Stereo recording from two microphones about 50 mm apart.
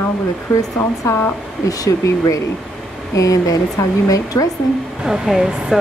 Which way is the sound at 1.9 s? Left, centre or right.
Left.